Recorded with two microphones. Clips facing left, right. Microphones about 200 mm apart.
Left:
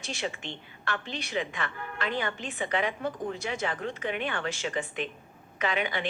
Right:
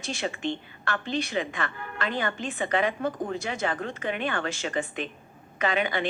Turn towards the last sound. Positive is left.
turn(degrees=-45)  # may be behind; listen again after turning